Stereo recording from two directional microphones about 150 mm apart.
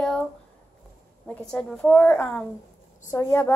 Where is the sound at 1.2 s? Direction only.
5° left (ahead or behind).